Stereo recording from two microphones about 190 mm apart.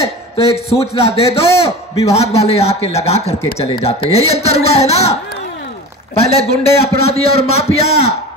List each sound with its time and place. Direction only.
0.0 s a man's voice: 30° left (ahead or behind)
6.1 s speech: 30° left (ahead or behind)